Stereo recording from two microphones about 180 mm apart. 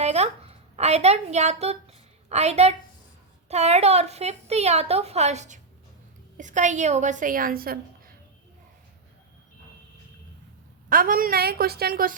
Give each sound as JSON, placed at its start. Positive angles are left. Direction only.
{"t": 0.0, "sound": "a woman's voice", "side_deg": -35}
{"t": 10.8, "sound": "a woman's voice", "side_deg": -50}